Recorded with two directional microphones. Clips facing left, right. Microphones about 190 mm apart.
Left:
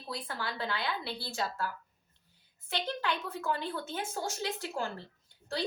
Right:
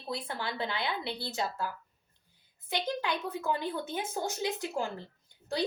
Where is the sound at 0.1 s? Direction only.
25° right (ahead or behind).